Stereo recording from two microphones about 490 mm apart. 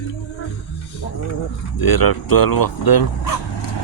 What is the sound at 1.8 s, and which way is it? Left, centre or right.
Speech, left.